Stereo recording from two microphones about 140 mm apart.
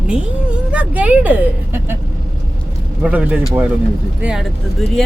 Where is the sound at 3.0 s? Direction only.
10° right (ahead or behind).